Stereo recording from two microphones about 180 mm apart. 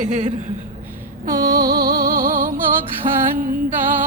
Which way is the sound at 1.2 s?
55° right (ahead or behind).